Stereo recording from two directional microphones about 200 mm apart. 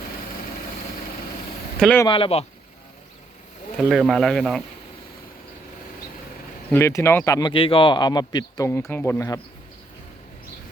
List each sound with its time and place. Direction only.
1.8 s speech: 5° left (ahead or behind)
2.0 s speech: 25° left (ahead or behind)
3.8 s speech: centre (ahead or behind)
6.7 s speech: 10° left (ahead or behind)